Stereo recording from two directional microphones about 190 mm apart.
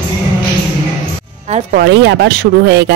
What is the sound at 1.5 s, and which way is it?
Speech, 50° right (ahead or behind).